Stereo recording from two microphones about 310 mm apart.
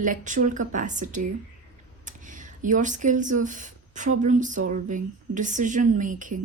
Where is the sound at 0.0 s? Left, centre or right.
Right.